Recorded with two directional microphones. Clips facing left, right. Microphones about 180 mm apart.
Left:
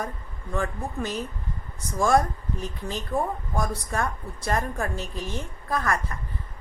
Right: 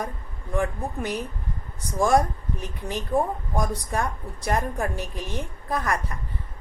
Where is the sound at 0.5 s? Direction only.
15° right (ahead or behind).